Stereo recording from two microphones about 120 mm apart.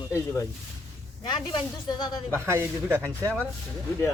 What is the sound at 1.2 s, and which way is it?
Speech, 40° left (ahead or behind).